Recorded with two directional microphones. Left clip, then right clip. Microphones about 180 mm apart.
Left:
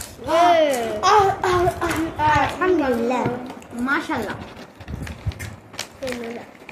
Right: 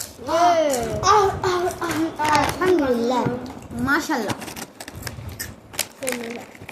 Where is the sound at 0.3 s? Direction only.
25° left (ahead or behind).